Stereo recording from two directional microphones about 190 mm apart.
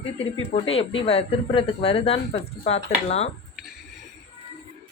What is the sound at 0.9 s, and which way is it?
Speech, 30° left (ahead or behind).